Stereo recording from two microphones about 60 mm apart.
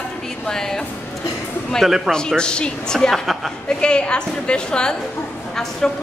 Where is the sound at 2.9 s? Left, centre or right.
Centre.